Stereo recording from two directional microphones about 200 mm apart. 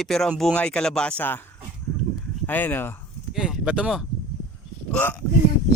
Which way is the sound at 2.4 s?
10° left (ahead or behind).